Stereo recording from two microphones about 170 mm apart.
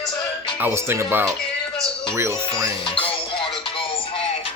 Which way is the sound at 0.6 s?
15° right (ahead or behind).